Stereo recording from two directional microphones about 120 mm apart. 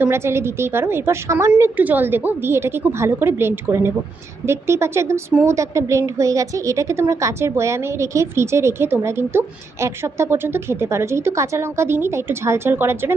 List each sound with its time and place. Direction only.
0.0 s a woman's voice: 20° right (ahead or behind)